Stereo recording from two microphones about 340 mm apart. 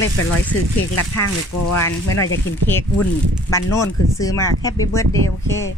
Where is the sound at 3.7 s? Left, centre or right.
Centre.